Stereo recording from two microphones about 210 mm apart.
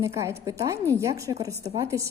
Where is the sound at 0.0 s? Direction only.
15° right (ahead or behind).